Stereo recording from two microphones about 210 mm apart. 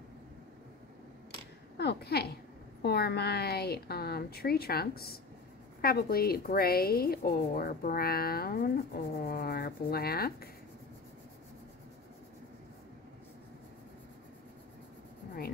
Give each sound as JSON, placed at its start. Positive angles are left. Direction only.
{"t": 1.8, "sound": "a woman's voice", "side_deg": 50}